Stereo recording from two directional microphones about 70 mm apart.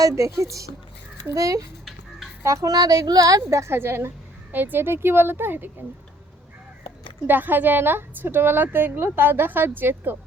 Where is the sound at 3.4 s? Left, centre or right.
Right.